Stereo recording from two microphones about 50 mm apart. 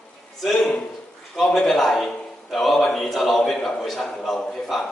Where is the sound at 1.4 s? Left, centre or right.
Centre.